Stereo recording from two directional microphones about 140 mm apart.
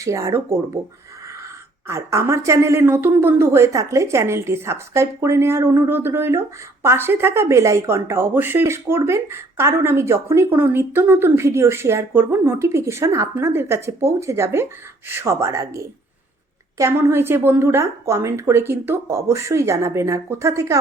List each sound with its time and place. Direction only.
0.0 s speech: 20° right (ahead or behind)
1.9 s speech: 20° right (ahead or behind)